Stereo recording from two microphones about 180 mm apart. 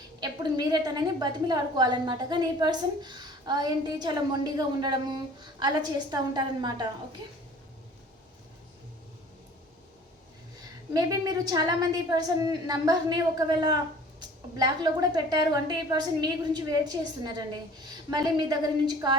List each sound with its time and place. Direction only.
0.2 s a woman's voice: 20° right (ahead or behind)
10.9 s a woman's voice: 20° right (ahead or behind)
14.2 s a woman's voice: 25° right (ahead or behind)